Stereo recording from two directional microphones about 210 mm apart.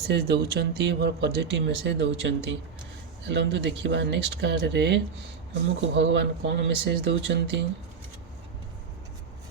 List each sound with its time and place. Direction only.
0.1 s speech: 50° right (ahead or behind)